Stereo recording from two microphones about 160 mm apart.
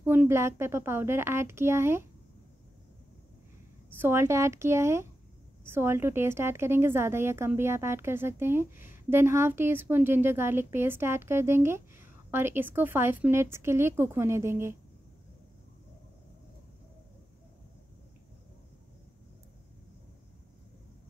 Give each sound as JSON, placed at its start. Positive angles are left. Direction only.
{"t": 0.0, "sound": "a woman's voice", "side_deg": -15}
{"t": 4.0, "sound": "a woman's voice", "side_deg": -15}